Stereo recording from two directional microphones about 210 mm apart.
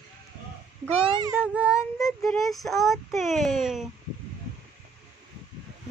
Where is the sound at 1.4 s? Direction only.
5° right (ahead or behind).